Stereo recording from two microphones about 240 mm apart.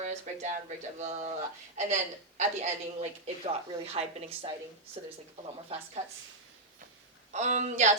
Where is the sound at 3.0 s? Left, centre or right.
Right.